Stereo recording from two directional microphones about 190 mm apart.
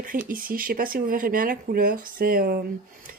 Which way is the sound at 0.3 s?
50° right (ahead or behind).